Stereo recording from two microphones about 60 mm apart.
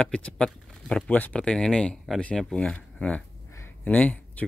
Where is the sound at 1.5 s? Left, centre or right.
Centre.